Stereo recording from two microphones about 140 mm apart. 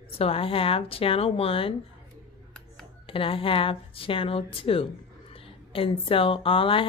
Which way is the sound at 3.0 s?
40° left (ahead or behind).